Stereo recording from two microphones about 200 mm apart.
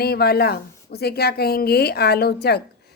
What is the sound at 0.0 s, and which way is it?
A woman's voice, 50° left (ahead or behind).